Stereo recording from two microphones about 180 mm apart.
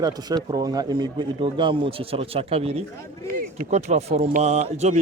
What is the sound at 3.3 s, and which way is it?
A man's voice, 45° right (ahead or behind).